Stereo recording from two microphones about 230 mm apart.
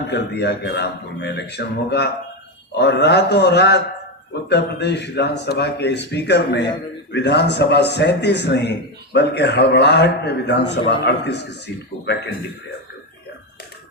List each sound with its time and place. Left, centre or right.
0.1 s speech: left